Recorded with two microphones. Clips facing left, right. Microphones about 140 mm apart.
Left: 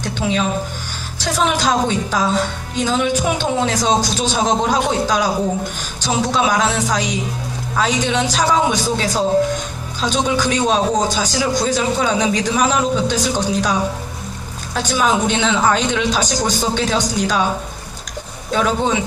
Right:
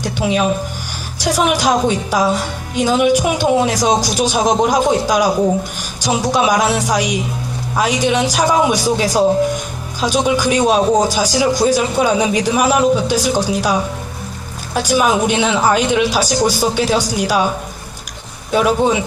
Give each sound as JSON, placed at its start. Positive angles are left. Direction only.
{"t": 0.2, "sound": "a man's voice", "side_deg": -15}
{"t": 18.5, "sound": "a man's voice", "side_deg": -10}